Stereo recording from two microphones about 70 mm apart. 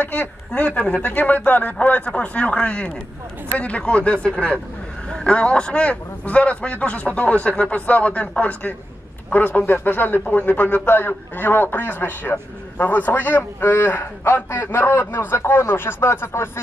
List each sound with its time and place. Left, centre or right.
0.0 s a man's voice: left